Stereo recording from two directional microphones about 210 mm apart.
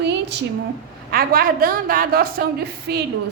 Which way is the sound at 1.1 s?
45° right (ahead or behind).